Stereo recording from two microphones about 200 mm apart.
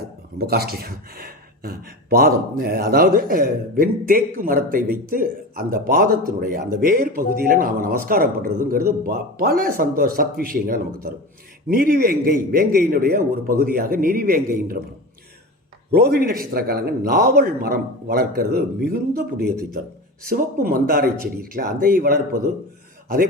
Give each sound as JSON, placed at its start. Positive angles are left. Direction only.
{"t": 0.3, "sound": "speech", "side_deg": -50}
{"t": 15.9, "sound": "speech", "side_deg": -50}